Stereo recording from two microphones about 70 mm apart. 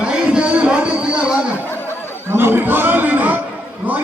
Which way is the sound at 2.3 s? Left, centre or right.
Right.